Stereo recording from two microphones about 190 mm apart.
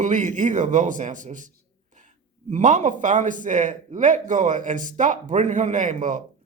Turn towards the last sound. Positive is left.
turn(degrees=-40)  # may be behind; listen again after turning